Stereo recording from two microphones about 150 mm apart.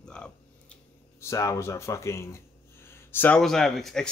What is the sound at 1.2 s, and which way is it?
Speech, 20° left (ahead or behind).